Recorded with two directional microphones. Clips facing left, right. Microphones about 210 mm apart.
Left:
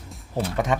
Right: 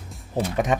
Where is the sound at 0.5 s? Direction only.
20° right (ahead or behind).